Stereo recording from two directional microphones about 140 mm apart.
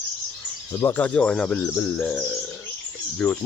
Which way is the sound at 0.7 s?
15° left (ahead or behind).